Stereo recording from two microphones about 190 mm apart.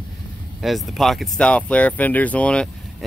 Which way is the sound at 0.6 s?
Centre (ahead or behind).